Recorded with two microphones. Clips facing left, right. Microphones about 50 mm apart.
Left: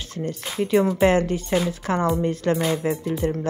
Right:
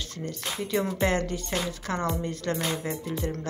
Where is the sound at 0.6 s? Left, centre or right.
Left.